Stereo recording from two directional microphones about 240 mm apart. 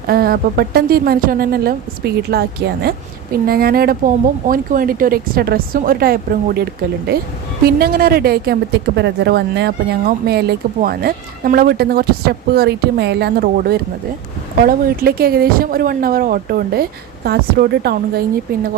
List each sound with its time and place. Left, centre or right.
0.1 s speech: right
7.6 s speech: right